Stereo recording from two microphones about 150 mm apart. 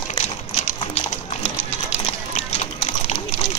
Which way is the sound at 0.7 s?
50° left (ahead or behind).